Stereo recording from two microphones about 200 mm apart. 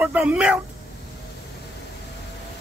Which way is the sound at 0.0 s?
5° right (ahead or behind).